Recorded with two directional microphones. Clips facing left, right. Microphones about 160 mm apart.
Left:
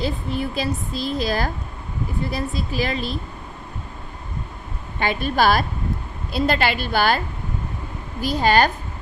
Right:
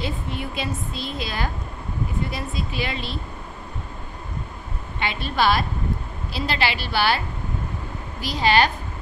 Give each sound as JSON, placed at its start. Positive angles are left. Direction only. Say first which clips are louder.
{"t": 0.0, "sound": "a woman's voice", "louder": "left 4 dB", "side_deg": 35}
{"t": 5.0, "sound": "a woman's voice", "louder": "left 3 dB", "side_deg": 45}
{"t": 8.2, "sound": "a woman's voice", "louder": "left 2 dB", "side_deg": 45}